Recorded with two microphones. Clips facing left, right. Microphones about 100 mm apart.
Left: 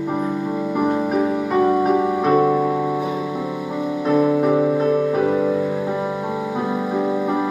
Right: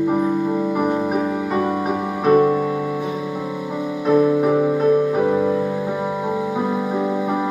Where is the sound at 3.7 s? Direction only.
5° right (ahead or behind).